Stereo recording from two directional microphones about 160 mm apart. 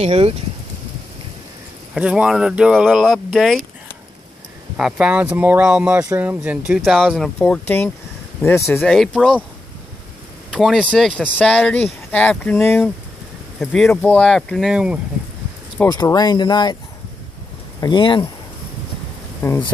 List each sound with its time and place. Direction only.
0.0 s speech: 40° right (ahead or behind)
2.0 s speech: 5° right (ahead or behind)
4.7 s speech: 5° right (ahead or behind)
7.3 s speech: 10° left (ahead or behind)
8.8 s speech: centre (ahead or behind)
10.5 s speech: 5° right (ahead or behind)
15.9 s speech: 25° left (ahead or behind)
17.7 s speech: 30° left (ahead or behind)
19.4 s speech: 20° left (ahead or behind)